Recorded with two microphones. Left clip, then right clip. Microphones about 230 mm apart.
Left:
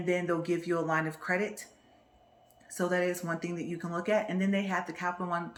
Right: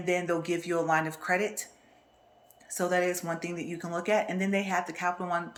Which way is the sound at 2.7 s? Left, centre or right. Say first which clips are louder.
Right 2 dB; left.